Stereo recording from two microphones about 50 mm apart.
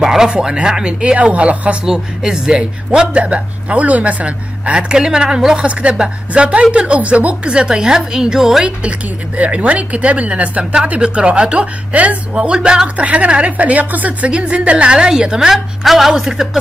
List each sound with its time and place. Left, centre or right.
0.0 s speech: centre
1.9 s a woman's voice: centre; by 7.3 s right
7.4 s speech: centre
9.4 s a woman's voice: right
12.4 s a woman's voice: centre